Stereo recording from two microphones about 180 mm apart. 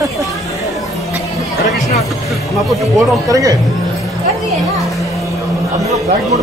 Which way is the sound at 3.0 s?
20° right (ahead or behind).